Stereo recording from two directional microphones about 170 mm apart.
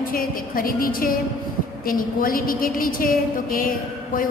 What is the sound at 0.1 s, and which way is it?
A woman's voice, 55° left (ahead or behind).